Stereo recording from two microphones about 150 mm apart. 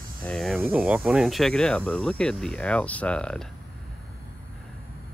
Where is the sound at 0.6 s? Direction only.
10° right (ahead or behind); by 3.4 s 5° left (ahead or behind).